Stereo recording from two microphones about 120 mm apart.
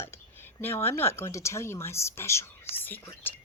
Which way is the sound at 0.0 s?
20° left (ahead or behind).